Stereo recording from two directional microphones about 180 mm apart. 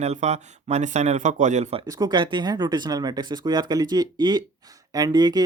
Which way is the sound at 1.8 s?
20° right (ahead or behind).